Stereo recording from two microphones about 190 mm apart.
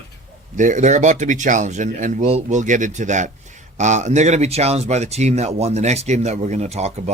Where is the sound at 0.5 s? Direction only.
40° right (ahead or behind).